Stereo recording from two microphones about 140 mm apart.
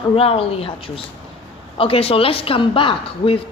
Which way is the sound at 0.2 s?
45° left (ahead or behind).